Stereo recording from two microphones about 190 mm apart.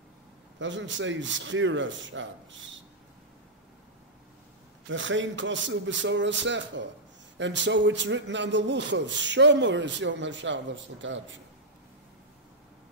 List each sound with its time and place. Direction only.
0.6 s a man's voice: 75° right (ahead or behind)
4.8 s a man's voice: 80° right